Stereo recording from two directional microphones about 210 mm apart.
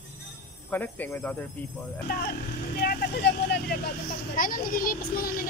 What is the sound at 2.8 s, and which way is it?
Speech, 45° left (ahead or behind).